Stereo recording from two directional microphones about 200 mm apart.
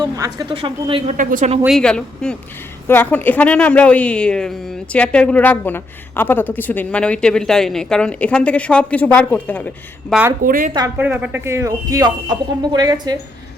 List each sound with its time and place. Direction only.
0.0 s speech: 20° right (ahead or behind)
1.1 s speech: 40° right (ahead or behind)
1.6 s a woman's voice: centre (ahead or behind)
10.4 s a woman's voice: 45° right (ahead or behind)
10.8 s speech: 10° right (ahead or behind)